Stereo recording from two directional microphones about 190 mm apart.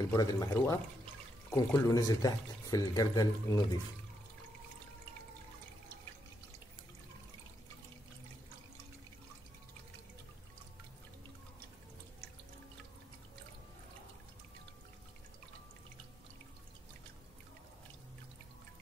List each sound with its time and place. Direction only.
0.1 s speech: 20° left (ahead or behind)